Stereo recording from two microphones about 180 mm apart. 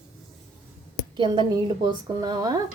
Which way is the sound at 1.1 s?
25° right (ahead or behind).